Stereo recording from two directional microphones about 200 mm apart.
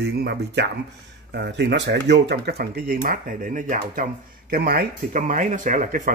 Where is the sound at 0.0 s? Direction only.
55° right (ahead or behind).